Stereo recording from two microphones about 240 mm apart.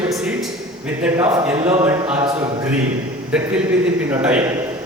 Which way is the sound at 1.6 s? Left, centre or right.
Right.